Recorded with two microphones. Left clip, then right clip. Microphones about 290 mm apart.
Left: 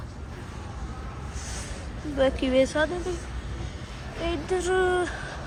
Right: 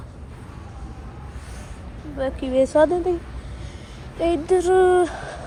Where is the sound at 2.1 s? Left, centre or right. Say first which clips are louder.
Right 1 dB; centre.